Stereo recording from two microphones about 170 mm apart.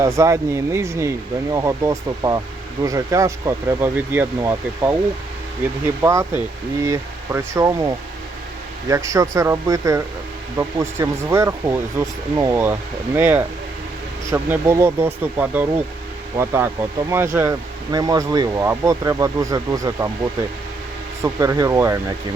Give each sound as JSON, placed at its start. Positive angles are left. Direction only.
{"t": 0.0, "sound": "speech", "side_deg": -15}
{"t": 8.9, "sound": "speech", "side_deg": -20}
{"t": 21.2, "sound": "speech", "side_deg": -20}